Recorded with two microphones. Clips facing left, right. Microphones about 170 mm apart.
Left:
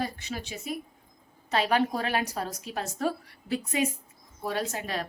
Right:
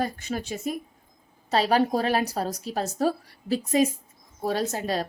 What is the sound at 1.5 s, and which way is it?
Speech, 35° right (ahead or behind).